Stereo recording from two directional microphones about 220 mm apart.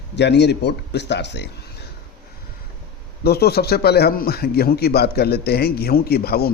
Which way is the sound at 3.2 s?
45° left (ahead or behind).